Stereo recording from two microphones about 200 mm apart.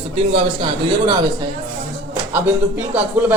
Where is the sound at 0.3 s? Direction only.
25° right (ahead or behind).